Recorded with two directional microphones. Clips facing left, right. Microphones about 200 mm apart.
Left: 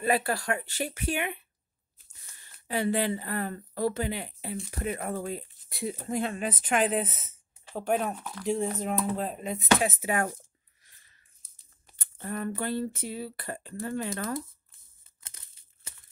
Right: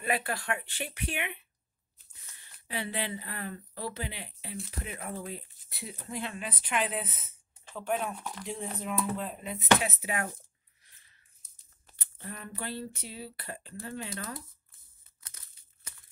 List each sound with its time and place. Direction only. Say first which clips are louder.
0.0 s speech: left 5 dB; 35° left (ahead or behind)
2.7 s speech: left 8 dB; 45° left (ahead or behind)
8.2 s speech: even; 10° right (ahead or behind)
8.5 s speech: left 9 dB; 45° left (ahead or behind)
12.0 s speech: left 10 dB; 50° left (ahead or behind)
15.2 s crumpling: left 1 dB; 25° left (ahead or behind)